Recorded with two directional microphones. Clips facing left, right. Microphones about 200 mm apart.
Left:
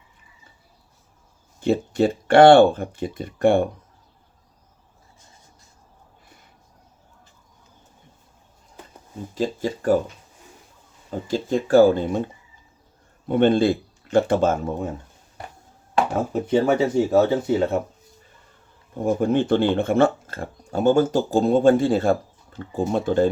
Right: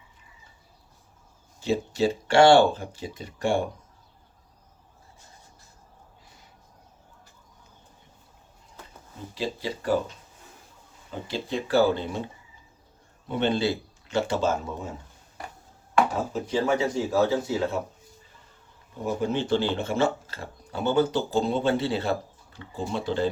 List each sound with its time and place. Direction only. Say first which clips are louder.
1.6 s speech: left 5 dB; 55° left (ahead or behind)
9.3 s speech: left 6 dB; 45° left (ahead or behind)
11.3 s speech: left 8 dB; 45° left (ahead or behind)
16.3 s speech: left 9 dB; 55° left (ahead or behind)
18.9 s speech: left 7 dB; 50° left (ahead or behind)